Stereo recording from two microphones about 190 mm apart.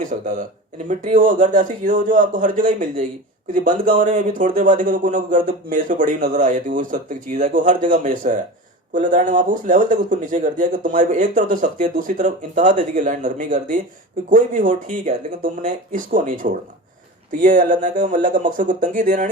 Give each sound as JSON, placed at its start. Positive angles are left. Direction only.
{"t": 0.0, "sound": "speech", "side_deg": -45}